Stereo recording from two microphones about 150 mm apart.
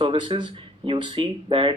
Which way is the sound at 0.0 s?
35° right (ahead or behind).